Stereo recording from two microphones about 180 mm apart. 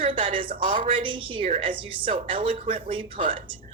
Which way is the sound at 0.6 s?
45° right (ahead or behind).